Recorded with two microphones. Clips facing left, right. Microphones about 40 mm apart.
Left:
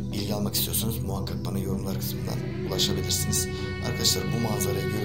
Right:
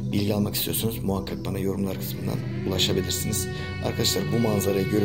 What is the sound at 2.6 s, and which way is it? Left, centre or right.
Speech, right.